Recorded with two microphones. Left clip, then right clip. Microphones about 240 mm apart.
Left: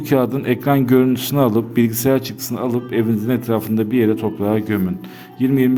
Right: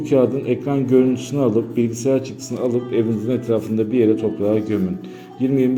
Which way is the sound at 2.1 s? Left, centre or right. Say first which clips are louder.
Left 2 dB; left.